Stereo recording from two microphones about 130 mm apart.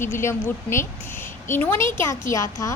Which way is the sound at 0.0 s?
20° left (ahead or behind).